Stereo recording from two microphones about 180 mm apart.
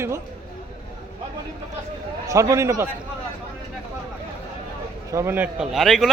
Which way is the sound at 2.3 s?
15° right (ahead or behind).